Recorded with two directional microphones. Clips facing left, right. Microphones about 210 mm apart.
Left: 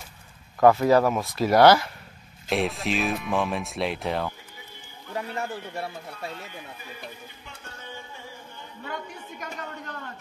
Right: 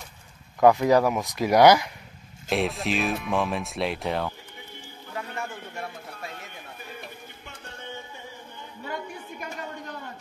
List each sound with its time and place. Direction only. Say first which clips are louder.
0.6 s speech: even; 15° right (ahead or behind)
2.5 s speech: even; centre (ahead or behind)
5.3 s speech: left 3 dB; 35° left (ahead or behind)
8.8 s speech: right 2 dB; 10° right (ahead or behind)